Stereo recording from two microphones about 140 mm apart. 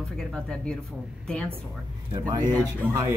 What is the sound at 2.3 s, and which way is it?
Speech, 30° right (ahead or behind).